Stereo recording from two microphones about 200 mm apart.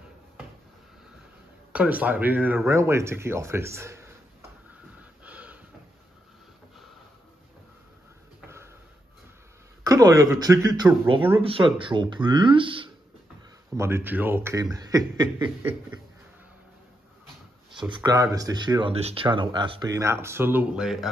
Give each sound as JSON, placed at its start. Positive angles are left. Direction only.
{"t": 1.7, "sound": "speech", "side_deg": -5}
{"t": 5.2, "sound": "snort", "side_deg": -5}
{"t": 9.8, "sound": "speech", "side_deg": -20}
{"t": 11.4, "sound": "speech", "side_deg": -25}
{"t": 13.7, "sound": "speech", "side_deg": -10}
{"t": 17.9, "sound": "speech", "side_deg": -20}